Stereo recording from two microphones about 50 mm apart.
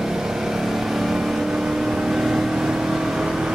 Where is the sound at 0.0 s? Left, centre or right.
Centre.